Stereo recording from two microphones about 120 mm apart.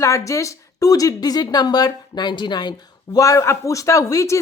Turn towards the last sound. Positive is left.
turn(degrees=25)  # may be behind; listen again after turning